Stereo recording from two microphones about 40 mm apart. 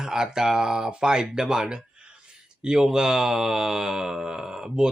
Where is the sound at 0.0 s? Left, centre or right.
Centre.